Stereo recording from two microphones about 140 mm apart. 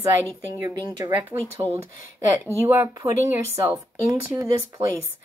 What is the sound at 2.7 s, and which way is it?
A woman's voice, 20° right (ahead or behind).